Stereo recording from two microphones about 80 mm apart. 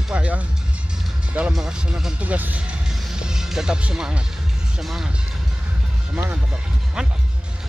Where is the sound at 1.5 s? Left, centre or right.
Centre.